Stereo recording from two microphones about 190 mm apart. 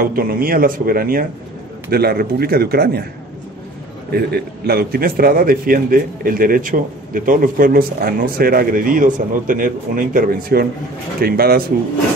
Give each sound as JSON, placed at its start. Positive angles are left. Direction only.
{"t": 0.0, "sound": "a man's voice", "side_deg": -50}
{"t": 4.1, "sound": "a man's voice", "side_deg": -55}